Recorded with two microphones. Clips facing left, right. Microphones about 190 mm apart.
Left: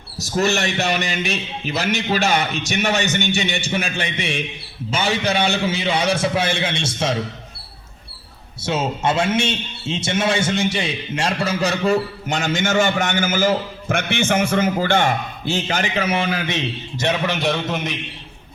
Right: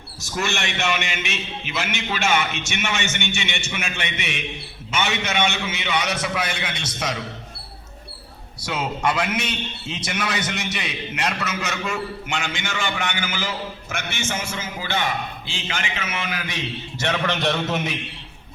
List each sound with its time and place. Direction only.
0.2 s a man's voice: 40° left (ahead or behind)
8.6 s a man's voice: 25° left (ahead or behind)
17.2 s a man's voice: 5° left (ahead or behind)